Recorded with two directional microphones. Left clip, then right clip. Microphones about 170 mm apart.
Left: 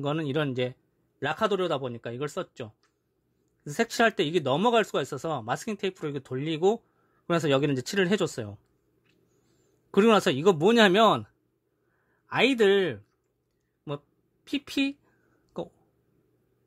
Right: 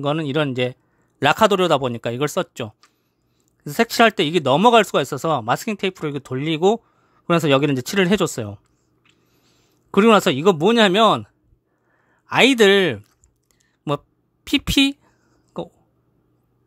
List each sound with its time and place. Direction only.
0.0 s speech: 20° right (ahead or behind)
1.2 s speech: 35° right (ahead or behind)
9.8 s speech: 20° right (ahead or behind)
12.3 s speech: 25° right (ahead or behind)
15.5 s speech: 15° right (ahead or behind)